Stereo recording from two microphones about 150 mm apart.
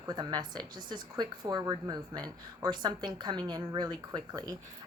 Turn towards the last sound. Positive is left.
turn(degrees=-30)  # may be behind; listen again after turning